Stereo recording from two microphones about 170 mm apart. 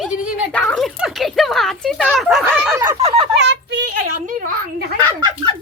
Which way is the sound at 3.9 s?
50° right (ahead or behind).